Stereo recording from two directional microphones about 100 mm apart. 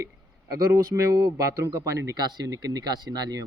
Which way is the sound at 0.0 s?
35° right (ahead or behind).